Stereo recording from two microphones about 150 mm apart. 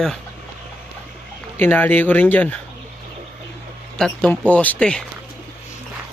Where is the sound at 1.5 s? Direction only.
15° left (ahead or behind).